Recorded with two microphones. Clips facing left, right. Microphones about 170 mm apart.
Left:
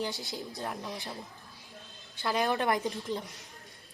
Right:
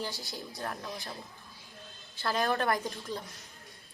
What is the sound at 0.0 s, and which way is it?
Speech, 20° left (ahead or behind).